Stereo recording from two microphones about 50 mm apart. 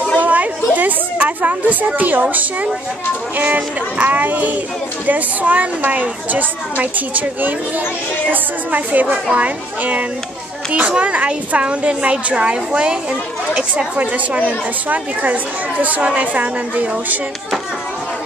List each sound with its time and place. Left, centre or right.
0.2 s a sound: right
2.0 s a woman's voice: right
3.3 s a woman's voice: right
13.9 s a woman's voice: right
15.8 s a woman's voice: right